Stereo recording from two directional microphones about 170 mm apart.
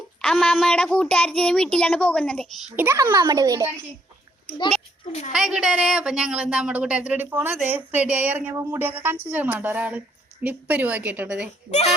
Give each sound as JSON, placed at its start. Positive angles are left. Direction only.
{"t": 0.2, "sound": "a child's voice", "side_deg": 5}
{"t": 2.7, "sound": "a child's voice", "side_deg": -15}
{"t": 5.3, "sound": "a woman's voice", "side_deg": -5}